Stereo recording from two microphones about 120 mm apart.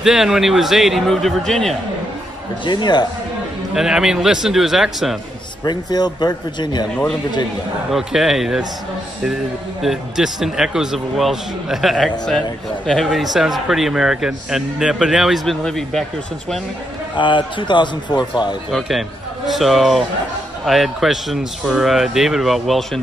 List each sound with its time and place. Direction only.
0.0 s a man's voice: 5° right (ahead or behind)
2.6 s a man's voice: 40° left (ahead or behind)
3.7 s a man's voice: 5° right (ahead or behind)
5.6 s a man's voice: 35° left (ahead or behind)
7.9 s a man's voice: centre (ahead or behind)
17.1 s a man's voice: 40° left (ahead or behind)
18.7 s a man's voice: centre (ahead or behind)